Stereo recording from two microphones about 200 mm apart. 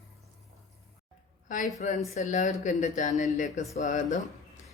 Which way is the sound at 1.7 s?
40° left (ahead or behind).